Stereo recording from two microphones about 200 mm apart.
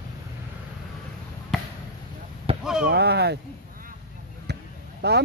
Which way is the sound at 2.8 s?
55° right (ahead or behind).